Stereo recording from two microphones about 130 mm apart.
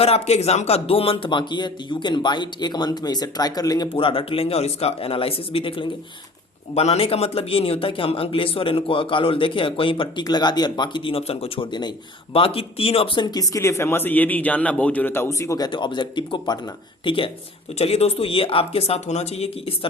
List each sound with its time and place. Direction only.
0.0 s a man's voice: 55° left (ahead or behind); by 3.8 s 30° left (ahead or behind)
3.9 s a man's voice: 45° left (ahead or behind)
12.3 s a man's voice: 45° left (ahead or behind)